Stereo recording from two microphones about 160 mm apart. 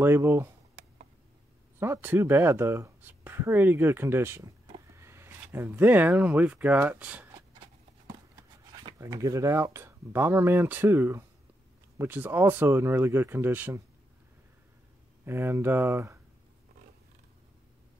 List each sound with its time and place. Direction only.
0.0 s speech: 15° right (ahead or behind)
1.8 s speech: 15° right (ahead or behind)
8.7 s speech: 25° right (ahead or behind)
15.2 s speech: 15° right (ahead or behind)